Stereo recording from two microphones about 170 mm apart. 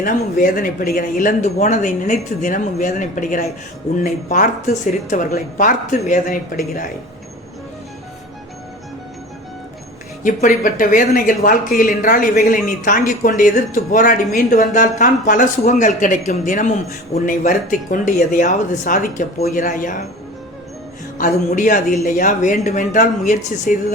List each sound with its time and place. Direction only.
0.0 s speech: 55° left (ahead or behind)
10.2 s speech: 50° left (ahead or behind)
21.2 s speech: 50° left (ahead or behind)